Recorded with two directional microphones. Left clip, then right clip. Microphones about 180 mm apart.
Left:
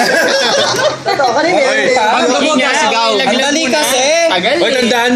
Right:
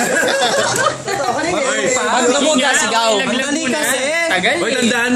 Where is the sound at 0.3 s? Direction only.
10° right (ahead or behind).